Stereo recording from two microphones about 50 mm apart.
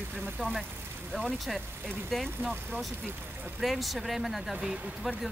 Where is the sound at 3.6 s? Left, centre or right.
Centre.